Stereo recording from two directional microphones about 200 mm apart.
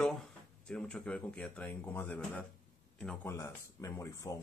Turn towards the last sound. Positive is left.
turn(degrees=15)  # may be behind; listen again after turning